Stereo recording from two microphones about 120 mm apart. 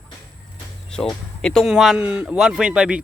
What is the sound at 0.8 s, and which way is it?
Speech, 5° left (ahead or behind).